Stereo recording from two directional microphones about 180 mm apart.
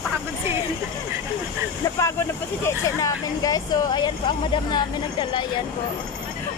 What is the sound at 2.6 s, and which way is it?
Speech, 20° left (ahead or behind).